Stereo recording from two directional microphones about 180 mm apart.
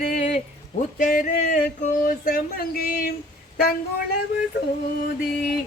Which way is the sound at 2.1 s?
50° left (ahead or behind).